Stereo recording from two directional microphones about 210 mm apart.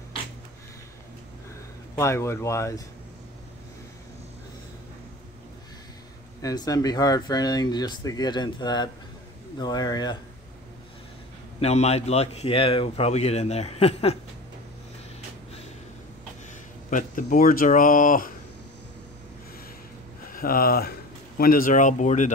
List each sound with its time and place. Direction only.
2.0 s speech: 15° left (ahead or behind)
6.4 s speech: 15° left (ahead or behind)
11.6 s speech: 30° left (ahead or behind)
16.9 s speech: 40° left (ahead or behind)
20.3 s speech: 45° left (ahead or behind)